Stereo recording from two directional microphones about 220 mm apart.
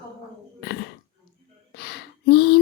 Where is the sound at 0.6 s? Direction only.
50° left (ahead or behind).